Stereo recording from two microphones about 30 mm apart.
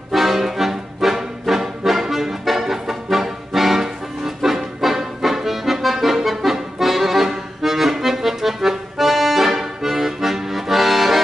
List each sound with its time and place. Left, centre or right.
0.1 s music: centre
5.2 s accordion: centre